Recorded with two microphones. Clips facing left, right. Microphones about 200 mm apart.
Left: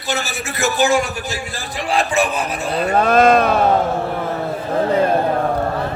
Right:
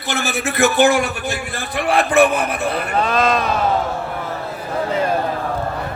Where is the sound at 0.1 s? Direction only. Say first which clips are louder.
Right 2 dB; 55° right (ahead or behind).